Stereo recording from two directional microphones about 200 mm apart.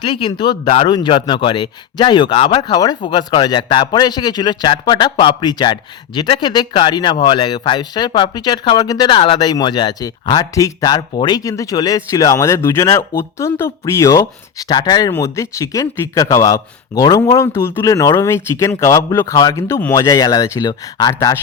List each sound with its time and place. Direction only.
0.0 s a man's voice: 25° left (ahead or behind)